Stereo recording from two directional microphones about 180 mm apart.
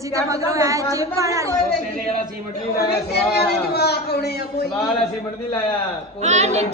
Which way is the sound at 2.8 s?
65° left (ahead or behind).